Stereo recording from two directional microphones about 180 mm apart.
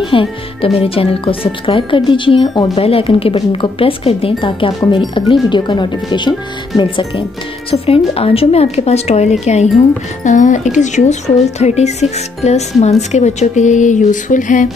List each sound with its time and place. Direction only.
0.0 s speech: 30° left (ahead or behind); by 14.7 s 45° left (ahead or behind)